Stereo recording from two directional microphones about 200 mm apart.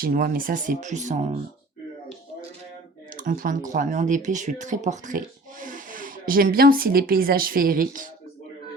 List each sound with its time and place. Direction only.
0.0 s speech: 45° right (ahead or behind)
3.2 s speech: 45° right (ahead or behind)